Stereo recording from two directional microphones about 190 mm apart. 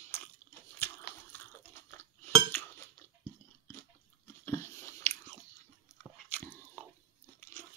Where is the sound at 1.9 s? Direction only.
15° left (ahead or behind).